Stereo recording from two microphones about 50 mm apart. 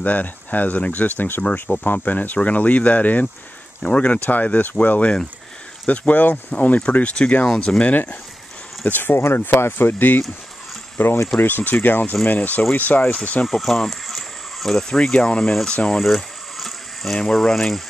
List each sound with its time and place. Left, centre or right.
0.0 s speech: left
3.8 s speech: left
4.2 s speech: left; by 7.9 s centre
7.9 s speech: left
13.5 s a sound: centre
15.0 s speech: centre
16.0 s boiling: centre
17.1 s speech: centre